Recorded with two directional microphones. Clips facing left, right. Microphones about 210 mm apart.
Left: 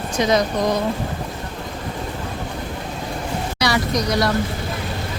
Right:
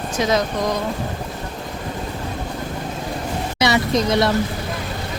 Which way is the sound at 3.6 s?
25° right (ahead or behind).